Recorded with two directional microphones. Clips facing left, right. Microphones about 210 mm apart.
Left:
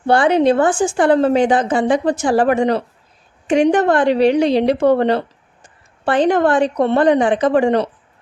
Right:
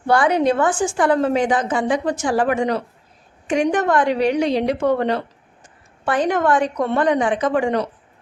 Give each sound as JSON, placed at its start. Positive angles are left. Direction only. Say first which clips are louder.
{"t": 0.1, "sound": "a woman's voice", "louder": "left 4 dB", "side_deg": 30}